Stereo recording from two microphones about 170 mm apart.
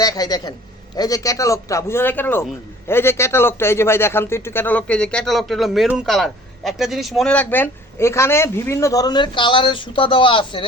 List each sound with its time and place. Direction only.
0.0 s a man's voice: 20° left (ahead or behind)